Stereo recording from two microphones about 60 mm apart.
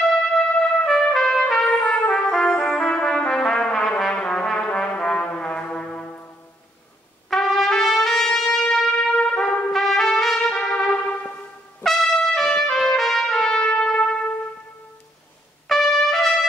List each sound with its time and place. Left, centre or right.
0.8 s trumpet: centre
4.1 s brass instrument: centre
7.2 s trumpet: centre
9.7 s trumpet: centre; by 11.3 s left
11.8 s trumpet: centre
15.7 s trumpet: centre